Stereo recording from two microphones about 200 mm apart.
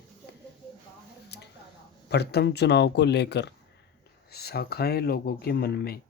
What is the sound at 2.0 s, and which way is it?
Speech, 55° left (ahead or behind).